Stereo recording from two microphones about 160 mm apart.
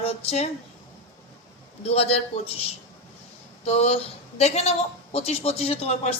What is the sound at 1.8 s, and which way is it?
Speech, 40° left (ahead or behind).